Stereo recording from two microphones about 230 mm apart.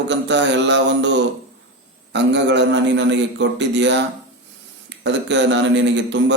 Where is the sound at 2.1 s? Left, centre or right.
Right.